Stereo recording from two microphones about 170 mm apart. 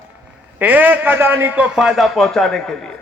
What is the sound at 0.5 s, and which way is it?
A man's voice, 10° right (ahead or behind).